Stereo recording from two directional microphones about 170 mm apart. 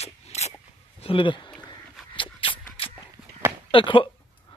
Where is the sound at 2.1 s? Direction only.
30° left (ahead or behind).